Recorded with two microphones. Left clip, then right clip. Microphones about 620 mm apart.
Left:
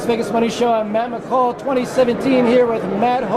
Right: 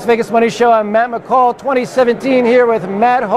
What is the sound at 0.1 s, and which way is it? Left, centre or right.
A man's voice, right.